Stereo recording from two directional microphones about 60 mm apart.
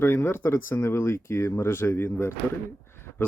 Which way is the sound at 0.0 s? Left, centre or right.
Left.